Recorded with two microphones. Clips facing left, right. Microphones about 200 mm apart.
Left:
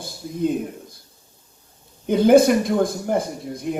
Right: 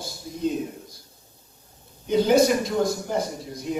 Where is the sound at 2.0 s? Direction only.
55° left (ahead or behind).